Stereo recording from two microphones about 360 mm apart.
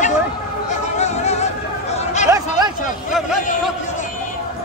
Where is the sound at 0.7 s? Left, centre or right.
Centre.